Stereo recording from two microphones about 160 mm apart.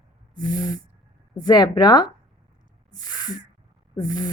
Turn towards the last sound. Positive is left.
turn(degrees=25)  # may be behind; listen again after turning